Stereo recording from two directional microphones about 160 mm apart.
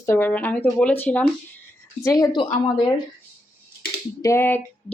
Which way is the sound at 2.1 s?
25° left (ahead or behind).